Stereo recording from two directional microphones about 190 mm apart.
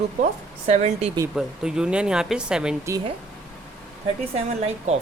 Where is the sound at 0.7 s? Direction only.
35° right (ahead or behind).